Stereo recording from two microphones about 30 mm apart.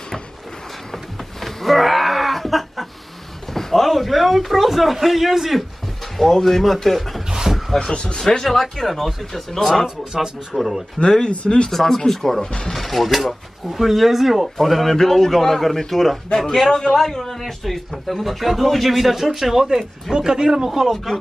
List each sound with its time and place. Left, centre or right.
0.9 s a sound: centre
4.9 s speech: centre
6.1 s speech: centre
7.2 s a sound: centre
7.8 s speech: left
8.2 s speech: centre
9.8 s speech: right
10.5 s speech: centre
11.2 s speech: left
11.7 s speech: centre
14.9 s speech: centre
19.5 s speech: centre
20.9 s speech: centre